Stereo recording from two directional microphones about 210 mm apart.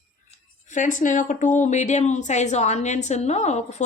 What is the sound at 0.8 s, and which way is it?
Speech, 40° left (ahead or behind).